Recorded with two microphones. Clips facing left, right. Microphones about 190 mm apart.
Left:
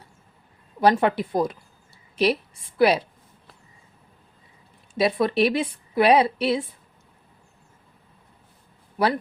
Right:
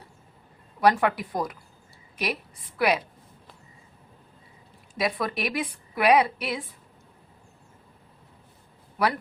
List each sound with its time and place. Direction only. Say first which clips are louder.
0.8 s a woman's voice: left 3 dB; 25° left (ahead or behind)
4.9 s a woman's voice: left 8 dB; 25° left (ahead or behind)